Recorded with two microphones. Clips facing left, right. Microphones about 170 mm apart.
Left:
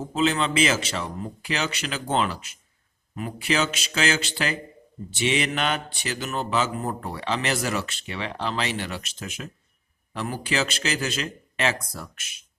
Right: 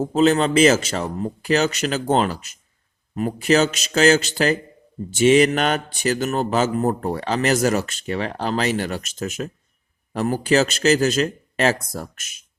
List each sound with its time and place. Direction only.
0.0 s speech: 40° right (ahead or behind)